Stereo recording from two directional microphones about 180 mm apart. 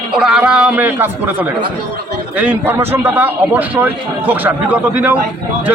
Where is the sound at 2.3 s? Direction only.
10° right (ahead or behind).